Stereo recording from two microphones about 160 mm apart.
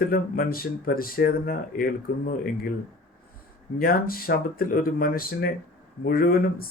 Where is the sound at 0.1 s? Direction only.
65° left (ahead or behind).